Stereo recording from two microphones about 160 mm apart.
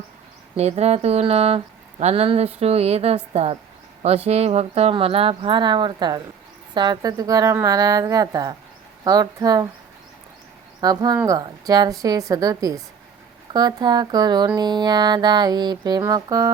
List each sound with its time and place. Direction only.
0.5 s speech: 40° right (ahead or behind); by 9.6 s 25° right (ahead or behind)
10.8 s speech: 25° right (ahead or behind)